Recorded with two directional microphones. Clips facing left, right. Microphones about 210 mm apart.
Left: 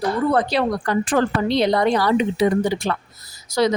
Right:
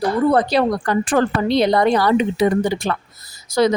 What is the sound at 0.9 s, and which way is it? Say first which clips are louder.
Speech: right 2 dB; 50° right (ahead or behind).